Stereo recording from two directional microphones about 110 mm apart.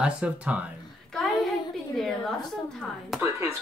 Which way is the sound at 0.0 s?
10° right (ahead or behind).